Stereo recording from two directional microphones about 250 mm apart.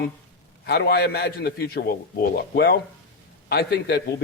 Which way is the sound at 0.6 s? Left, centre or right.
Left.